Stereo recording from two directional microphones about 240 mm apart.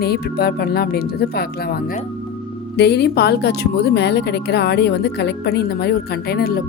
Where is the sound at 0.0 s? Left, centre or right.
Left.